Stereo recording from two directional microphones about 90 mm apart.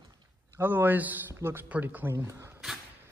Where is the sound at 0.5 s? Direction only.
25° right (ahead or behind).